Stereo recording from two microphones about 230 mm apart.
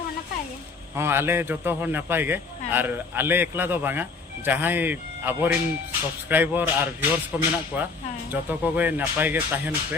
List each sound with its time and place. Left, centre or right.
0.9 s a man's voice: centre